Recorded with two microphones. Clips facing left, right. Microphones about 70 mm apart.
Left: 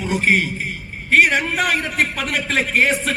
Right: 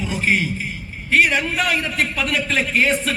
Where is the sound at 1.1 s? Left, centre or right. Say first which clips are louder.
Left 2 dB; left.